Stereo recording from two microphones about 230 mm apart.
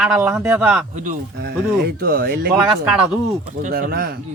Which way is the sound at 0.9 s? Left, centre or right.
Right.